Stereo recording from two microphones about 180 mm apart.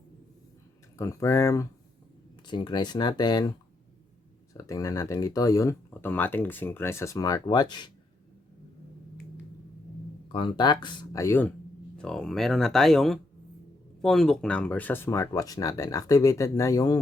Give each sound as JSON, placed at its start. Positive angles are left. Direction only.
{"t": 0.9, "sound": "speech", "side_deg": 15}
{"t": 4.5, "sound": "speech", "side_deg": 20}
{"t": 10.3, "sound": "speech", "side_deg": 25}